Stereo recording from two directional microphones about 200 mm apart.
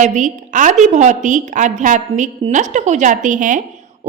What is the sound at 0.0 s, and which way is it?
A woman's voice, 35° right (ahead or behind).